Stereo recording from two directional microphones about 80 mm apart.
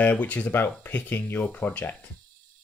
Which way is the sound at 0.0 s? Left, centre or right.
Centre.